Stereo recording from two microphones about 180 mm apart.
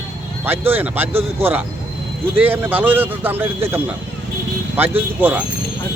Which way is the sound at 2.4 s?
10° right (ahead or behind).